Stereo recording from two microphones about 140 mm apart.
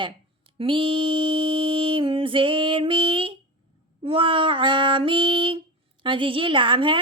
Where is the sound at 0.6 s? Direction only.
40° right (ahead or behind).